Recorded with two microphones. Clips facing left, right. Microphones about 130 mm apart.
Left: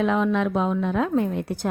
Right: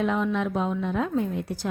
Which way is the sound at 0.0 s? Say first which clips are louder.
Left 4 dB; 85° left.